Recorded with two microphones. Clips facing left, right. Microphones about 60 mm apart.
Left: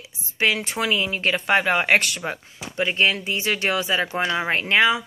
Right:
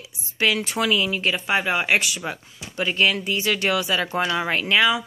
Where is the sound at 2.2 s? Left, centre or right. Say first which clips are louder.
Left 1 dB; left.